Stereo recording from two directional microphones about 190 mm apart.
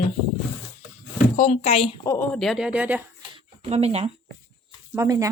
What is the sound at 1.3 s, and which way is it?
Speech, 35° left (ahead or behind).